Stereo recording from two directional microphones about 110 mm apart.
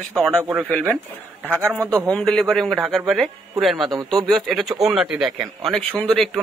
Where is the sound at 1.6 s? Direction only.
20° right (ahead or behind).